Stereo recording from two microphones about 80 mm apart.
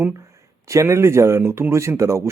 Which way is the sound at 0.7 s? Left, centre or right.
Right.